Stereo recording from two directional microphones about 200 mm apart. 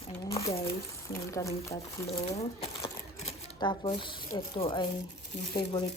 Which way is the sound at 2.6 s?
30° left (ahead or behind).